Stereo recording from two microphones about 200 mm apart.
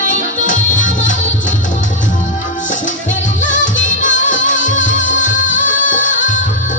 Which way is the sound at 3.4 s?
40° left (ahead or behind).